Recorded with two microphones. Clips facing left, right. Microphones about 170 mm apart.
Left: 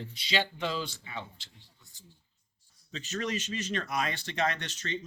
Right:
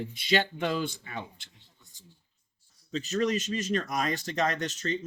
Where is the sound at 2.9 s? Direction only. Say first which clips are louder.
Right 7 dB; 35° right (ahead or behind).